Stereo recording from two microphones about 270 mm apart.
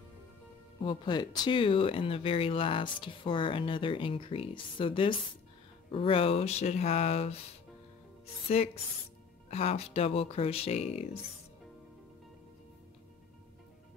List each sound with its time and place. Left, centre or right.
0.8 s speech: centre
9.5 s speech: left